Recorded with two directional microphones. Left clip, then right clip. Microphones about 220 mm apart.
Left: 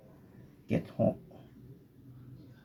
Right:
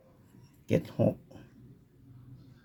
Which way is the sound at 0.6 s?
50° right (ahead or behind).